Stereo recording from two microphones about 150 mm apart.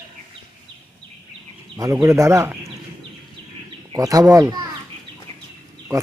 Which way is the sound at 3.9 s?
25° right (ahead or behind).